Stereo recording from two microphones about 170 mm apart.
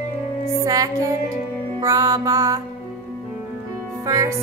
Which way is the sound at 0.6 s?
20° right (ahead or behind).